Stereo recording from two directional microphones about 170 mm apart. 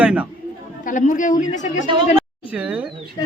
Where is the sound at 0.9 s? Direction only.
50° left (ahead or behind).